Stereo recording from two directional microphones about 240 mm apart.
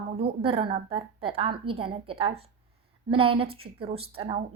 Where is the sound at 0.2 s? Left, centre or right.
Right.